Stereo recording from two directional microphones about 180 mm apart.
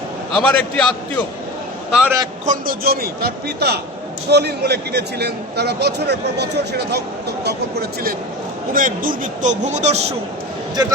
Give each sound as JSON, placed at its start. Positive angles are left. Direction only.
{"t": 0.3, "sound": "a man's voice", "side_deg": 5}
{"t": 2.5, "sound": "speech", "side_deg": -55}
{"t": 8.7, "sound": "speech", "side_deg": -50}